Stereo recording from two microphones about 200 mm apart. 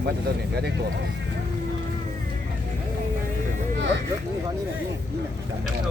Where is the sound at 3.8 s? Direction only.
65° right (ahead or behind).